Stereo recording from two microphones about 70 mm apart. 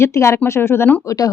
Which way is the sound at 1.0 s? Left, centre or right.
Left.